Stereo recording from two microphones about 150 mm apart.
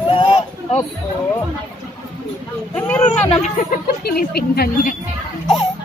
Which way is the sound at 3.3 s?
55° left (ahead or behind).